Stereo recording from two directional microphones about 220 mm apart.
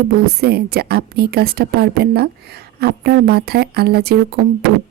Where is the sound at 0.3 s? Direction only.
45° right (ahead or behind).